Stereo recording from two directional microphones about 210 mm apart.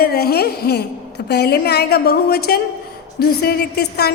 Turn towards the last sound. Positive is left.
turn(degrees=50)  # may be behind; listen again after turning